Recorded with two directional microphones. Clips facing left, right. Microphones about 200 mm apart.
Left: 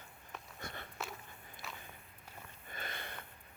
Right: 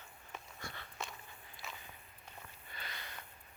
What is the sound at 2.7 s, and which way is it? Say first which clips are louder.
Sniff: left 5 dB; 50° left (ahead or behind).